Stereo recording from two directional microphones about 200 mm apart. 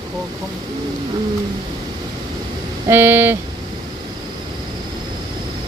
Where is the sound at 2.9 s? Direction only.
10° right (ahead or behind).